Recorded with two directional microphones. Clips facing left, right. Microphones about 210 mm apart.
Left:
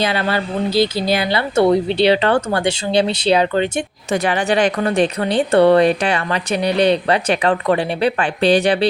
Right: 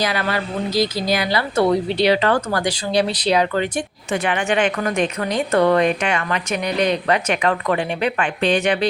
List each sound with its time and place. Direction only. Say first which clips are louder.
0.0 s speech: left 3 dB; 25° left (ahead or behind)
4.1 s a woman's voice: left 3 dB; 40° left (ahead or behind)